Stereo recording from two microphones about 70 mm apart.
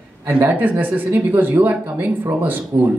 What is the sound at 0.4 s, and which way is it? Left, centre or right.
A man's voice, right.